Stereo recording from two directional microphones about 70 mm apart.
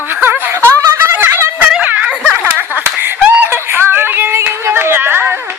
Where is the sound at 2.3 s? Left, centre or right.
Right.